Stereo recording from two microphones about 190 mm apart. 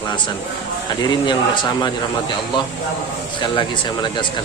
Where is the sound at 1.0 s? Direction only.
25° left (ahead or behind).